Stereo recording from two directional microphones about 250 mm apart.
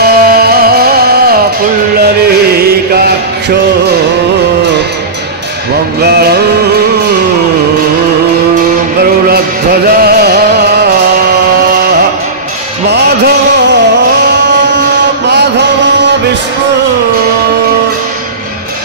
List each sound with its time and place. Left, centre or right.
0.0 s music: right
6.0 s music: right
9.3 s music: right
12.9 s a sound: right